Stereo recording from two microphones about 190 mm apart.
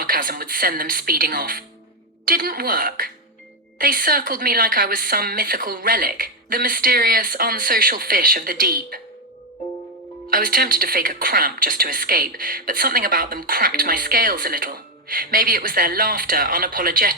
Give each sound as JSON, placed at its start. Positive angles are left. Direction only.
{"t": 0.0, "sound": "speech", "side_deg": -50}
{"t": 10.2, "sound": "speech", "side_deg": -50}